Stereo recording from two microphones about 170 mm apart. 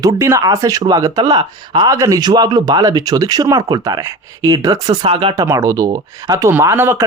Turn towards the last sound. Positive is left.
turn(degrees=-15)  # may be behind; listen again after turning